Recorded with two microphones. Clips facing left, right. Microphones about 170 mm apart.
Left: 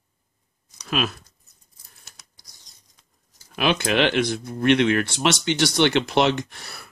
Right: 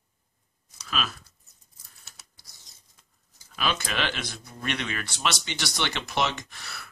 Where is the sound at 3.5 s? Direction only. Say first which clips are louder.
Left 8 dB; 60° left (ahead or behind).